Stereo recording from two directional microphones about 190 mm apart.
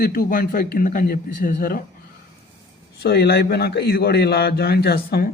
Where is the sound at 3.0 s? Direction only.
55° left (ahead or behind).